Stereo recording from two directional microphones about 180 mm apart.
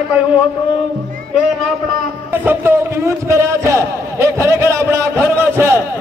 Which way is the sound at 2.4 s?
10° right (ahead or behind).